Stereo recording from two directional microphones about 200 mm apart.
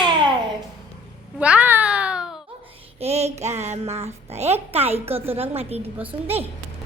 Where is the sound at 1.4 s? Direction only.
5° right (ahead or behind).